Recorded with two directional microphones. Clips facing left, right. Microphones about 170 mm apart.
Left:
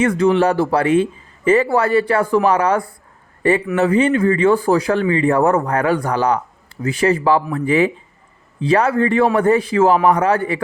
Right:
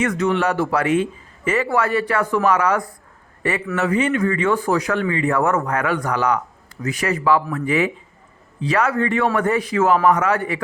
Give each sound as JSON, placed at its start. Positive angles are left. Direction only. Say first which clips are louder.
{"t": 0.0, "sound": "speech", "louder": "left 5 dB", "side_deg": 30}